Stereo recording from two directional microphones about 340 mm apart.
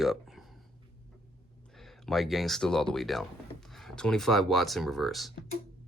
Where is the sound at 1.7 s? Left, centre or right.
Centre.